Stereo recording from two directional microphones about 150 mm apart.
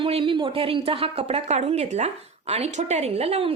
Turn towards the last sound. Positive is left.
turn(degrees=-40)  # may be behind; listen again after turning